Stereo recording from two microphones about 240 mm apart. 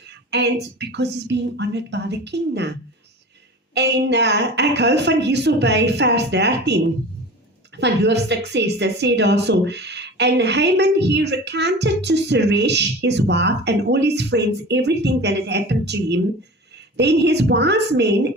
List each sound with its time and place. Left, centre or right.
0.3 s a woman's voice: right
3.8 s a woman's voice: right